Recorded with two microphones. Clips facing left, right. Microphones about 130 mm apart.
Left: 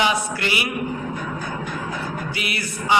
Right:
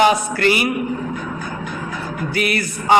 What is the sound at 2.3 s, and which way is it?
Speech, 50° right (ahead or behind).